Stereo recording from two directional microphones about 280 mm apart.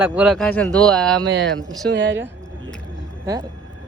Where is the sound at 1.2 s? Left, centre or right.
Right.